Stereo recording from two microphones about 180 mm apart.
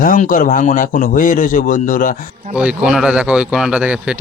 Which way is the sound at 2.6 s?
5° right (ahead or behind).